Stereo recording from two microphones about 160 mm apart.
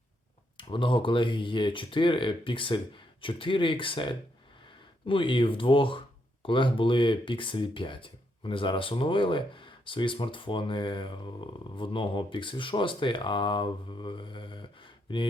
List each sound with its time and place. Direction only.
0.5 s speech: 30° left (ahead or behind)